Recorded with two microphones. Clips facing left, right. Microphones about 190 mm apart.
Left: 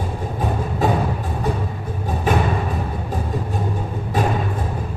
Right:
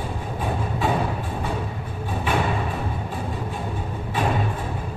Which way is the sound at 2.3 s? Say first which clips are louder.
Left 4 dB; 40° left (ahead or behind).